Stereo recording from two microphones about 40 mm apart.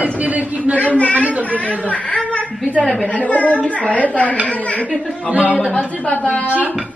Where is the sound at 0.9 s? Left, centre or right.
Left.